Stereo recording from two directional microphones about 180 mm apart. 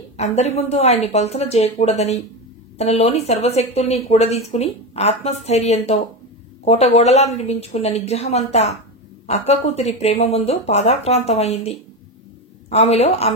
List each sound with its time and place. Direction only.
0.2 s speech: 35° left (ahead or behind)